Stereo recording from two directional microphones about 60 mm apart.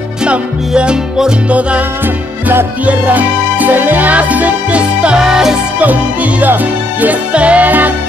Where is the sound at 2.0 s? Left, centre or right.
Right.